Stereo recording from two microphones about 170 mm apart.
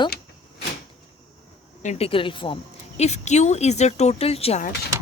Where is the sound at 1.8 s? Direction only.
40° left (ahead or behind).